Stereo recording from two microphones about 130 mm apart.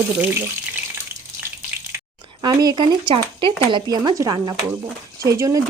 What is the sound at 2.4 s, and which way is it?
Speech, 35° right (ahead or behind).